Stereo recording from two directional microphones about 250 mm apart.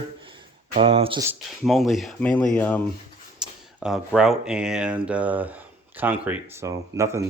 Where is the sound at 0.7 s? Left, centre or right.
Right.